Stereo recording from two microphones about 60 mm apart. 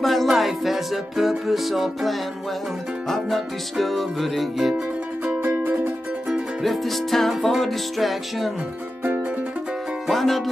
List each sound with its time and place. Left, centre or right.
0.0 s music: centre
5.4 s music: right
6.6 s music: centre
10.0 s music: centre